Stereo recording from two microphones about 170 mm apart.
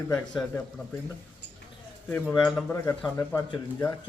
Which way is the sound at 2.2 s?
Centre (ahead or behind).